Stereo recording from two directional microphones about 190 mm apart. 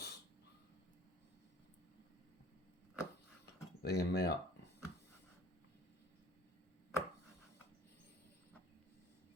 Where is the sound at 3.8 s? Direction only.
55° left (ahead or behind).